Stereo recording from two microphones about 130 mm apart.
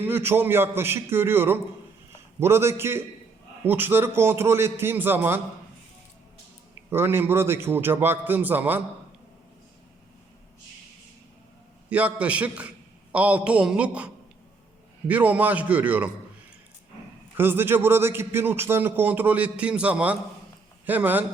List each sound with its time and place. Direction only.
0.0 s a man's voice: 15° right (ahead or behind)
6.9 s a man's voice: 20° right (ahead or behind)
11.9 s a man's voice: 10° right (ahead or behind)
17.3 s a man's voice: 15° right (ahead or behind)